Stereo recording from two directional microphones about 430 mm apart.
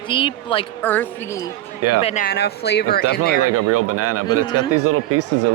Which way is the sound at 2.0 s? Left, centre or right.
Centre.